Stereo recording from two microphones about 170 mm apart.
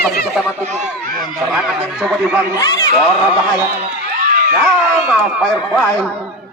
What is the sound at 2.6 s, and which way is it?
Speech, 20° left (ahead or behind).